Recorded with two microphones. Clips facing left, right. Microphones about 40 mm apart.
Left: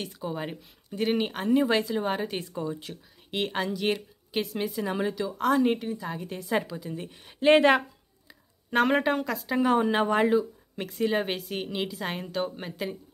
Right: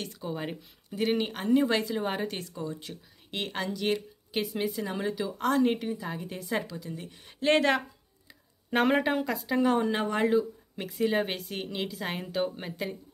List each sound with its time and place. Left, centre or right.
0.0 s speech: centre
4.8 s a woman's voice: centre
8.6 s a woman's voice: centre
10.3 s speech: centre